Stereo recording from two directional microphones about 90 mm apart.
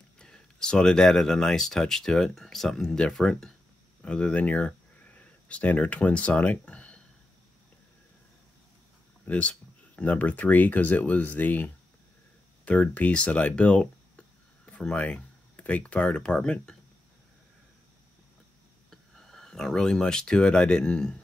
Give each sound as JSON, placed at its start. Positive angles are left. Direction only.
{"t": 0.2, "sound": "speech", "side_deg": 10}
{"t": 9.2, "sound": "speech", "side_deg": 15}
{"t": 18.9, "sound": "speech", "side_deg": 5}